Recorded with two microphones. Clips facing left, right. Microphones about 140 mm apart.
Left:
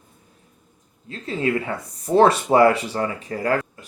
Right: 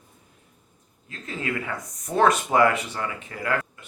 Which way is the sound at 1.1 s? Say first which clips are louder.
Left 7 dB; 30° left (ahead or behind).